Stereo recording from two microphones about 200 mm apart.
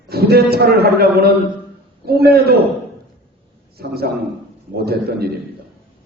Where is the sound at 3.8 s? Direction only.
50° right (ahead or behind).